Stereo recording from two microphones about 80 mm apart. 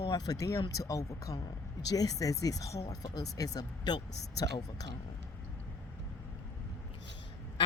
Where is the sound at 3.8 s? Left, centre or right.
Left.